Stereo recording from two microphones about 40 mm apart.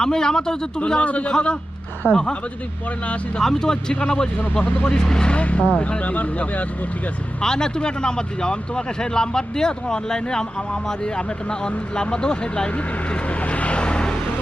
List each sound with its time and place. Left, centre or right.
0.0 s speech: centre
0.9 s speech: left
1.3 s speech: left
2.0 s speech: right
3.4 s speech: centre
4.6 s speech: left
4.9 s speech: centre
5.4 s speech: left
7.4 s speech: centre
11.6 s speech: left
13.2 s vehicle: left